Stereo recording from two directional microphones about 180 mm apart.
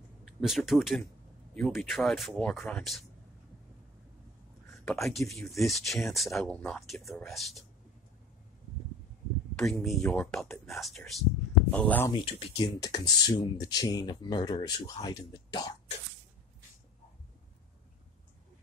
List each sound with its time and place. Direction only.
0.2 s speech: centre (ahead or behind)
4.8 s speech: centre (ahead or behind)
9.6 s speech: 5° left (ahead or behind)
12.1 s speech: 30° left (ahead or behind)